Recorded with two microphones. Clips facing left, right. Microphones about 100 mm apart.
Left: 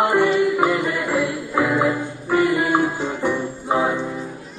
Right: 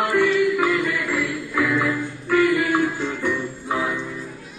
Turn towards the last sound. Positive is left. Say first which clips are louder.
# left 4 dB
turn(degrees=30)  # may be behind; listen again after turning